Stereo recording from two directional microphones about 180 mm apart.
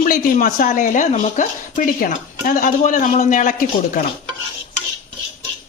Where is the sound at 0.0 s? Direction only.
50° left (ahead or behind).